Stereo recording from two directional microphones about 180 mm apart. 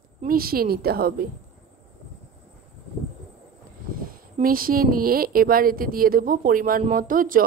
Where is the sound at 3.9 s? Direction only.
50° right (ahead or behind).